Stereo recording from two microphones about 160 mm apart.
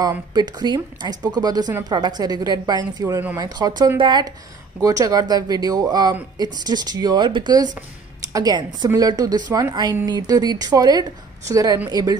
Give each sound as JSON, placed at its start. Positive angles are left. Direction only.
{"t": 0.3, "sound": "a woman's voice", "side_deg": -25}